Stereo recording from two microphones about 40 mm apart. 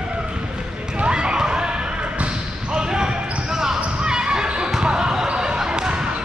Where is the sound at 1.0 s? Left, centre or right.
Right.